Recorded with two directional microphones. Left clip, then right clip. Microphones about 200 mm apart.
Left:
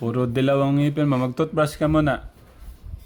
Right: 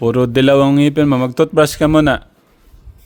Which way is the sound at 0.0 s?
50° right (ahead or behind).